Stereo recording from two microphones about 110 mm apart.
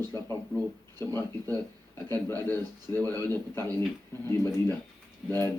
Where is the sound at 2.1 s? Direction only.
20° left (ahead or behind).